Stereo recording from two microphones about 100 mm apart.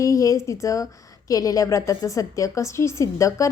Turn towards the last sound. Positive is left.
turn(degrees=30)  # may be behind; listen again after turning